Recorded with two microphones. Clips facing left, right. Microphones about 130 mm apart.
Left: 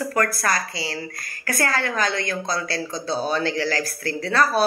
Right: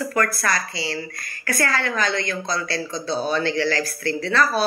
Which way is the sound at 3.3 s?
40° left (ahead or behind).